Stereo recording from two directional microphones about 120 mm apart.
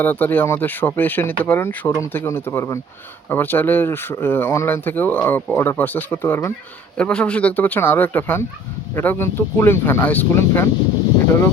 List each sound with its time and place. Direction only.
0.0 s speech: 15° left (ahead or behind)